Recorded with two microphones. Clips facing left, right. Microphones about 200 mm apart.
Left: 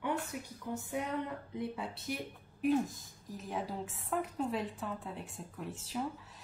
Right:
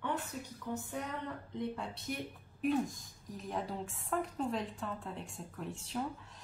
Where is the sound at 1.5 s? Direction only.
5° left (ahead or behind).